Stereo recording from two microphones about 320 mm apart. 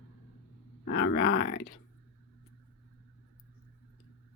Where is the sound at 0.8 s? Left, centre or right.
Left.